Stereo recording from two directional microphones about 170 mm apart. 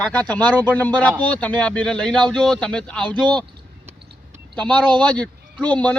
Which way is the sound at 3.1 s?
25° right (ahead or behind).